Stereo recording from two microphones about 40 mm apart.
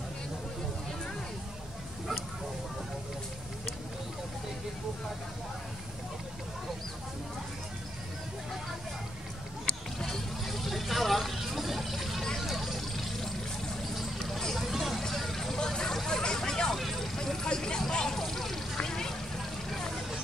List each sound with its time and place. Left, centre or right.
10.0 s hubbub: centre
12.4 s vehicle: centre
14.8 s vehicle: centre
16.7 s vehicle: centre